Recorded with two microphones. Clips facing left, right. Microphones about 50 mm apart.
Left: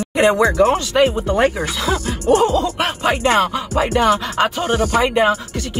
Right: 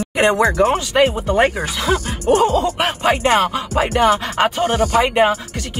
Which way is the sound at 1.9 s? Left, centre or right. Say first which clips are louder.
Left 1 dB; right.